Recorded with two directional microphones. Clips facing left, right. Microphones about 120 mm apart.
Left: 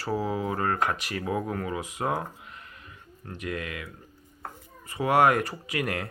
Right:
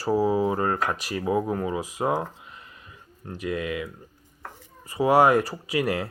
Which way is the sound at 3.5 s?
20° right (ahead or behind).